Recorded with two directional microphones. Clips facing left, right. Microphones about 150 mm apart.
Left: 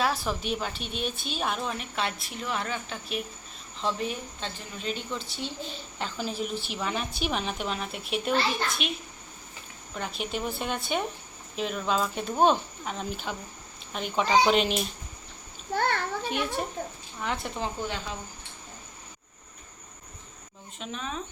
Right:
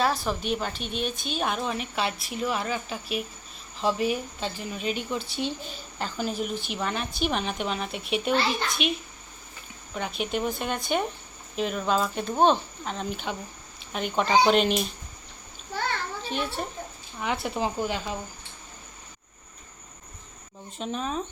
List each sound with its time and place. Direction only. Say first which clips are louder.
0.3 s a woman's voice: right 2 dB; centre (ahead or behind); by 5.5 s 15° right (ahead or behind)
6.0 s a woman's voice: right 2 dB; centre (ahead or behind)
9.9 s a woman's voice: right 3 dB; centre (ahead or behind)
15.7 s a sound: left 3 dB; 55° left (ahead or behind)
17.2 s speech: right 4 dB; 5° right (ahead or behind)
20.7 s speech: right 5 dB; 40° right (ahead or behind)